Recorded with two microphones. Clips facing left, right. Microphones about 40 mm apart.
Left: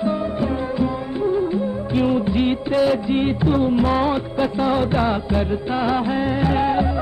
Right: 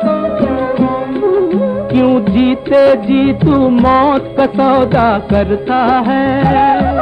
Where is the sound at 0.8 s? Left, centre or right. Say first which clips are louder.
Right 9 dB; right.